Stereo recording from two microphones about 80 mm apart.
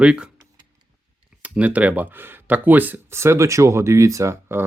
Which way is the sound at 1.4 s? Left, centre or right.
Centre.